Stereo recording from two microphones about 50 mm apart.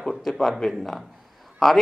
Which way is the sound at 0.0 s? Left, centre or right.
Centre.